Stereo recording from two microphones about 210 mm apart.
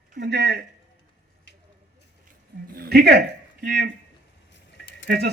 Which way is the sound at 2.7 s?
45° right (ahead or behind).